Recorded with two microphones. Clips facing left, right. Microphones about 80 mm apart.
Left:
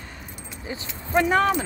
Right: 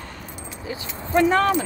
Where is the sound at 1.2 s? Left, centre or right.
Centre.